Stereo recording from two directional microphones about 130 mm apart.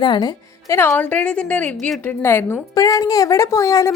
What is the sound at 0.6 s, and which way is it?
A woman's voice, 20° left (ahead or behind).